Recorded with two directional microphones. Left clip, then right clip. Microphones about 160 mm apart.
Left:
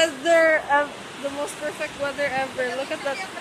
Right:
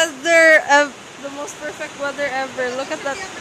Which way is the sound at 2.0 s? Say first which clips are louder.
Right 3 dB; 15° right (ahead or behind).